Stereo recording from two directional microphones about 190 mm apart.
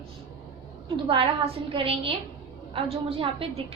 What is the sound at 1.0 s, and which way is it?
A woman's voice, 30° right (ahead or behind).